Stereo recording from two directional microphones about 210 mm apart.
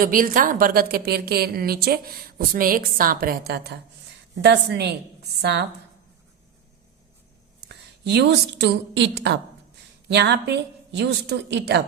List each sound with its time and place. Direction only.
0.0 s a woman's voice: 40° right (ahead or behind)
7.7 s a woman's voice: 55° right (ahead or behind)